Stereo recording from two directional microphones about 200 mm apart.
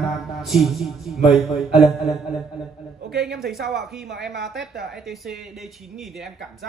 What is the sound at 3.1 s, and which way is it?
Speech, 55° right (ahead or behind).